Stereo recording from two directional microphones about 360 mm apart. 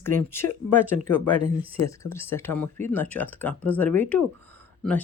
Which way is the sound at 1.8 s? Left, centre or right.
Left.